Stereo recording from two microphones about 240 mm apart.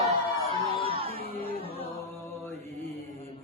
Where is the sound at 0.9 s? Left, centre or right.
Right.